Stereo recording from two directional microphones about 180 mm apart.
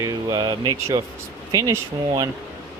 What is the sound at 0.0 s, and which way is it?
Speech, 20° right (ahead or behind).